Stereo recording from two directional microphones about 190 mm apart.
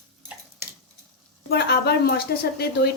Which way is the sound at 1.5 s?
60° left (ahead or behind).